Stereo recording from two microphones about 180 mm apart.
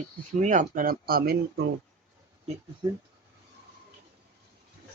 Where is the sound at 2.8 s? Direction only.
20° right (ahead or behind).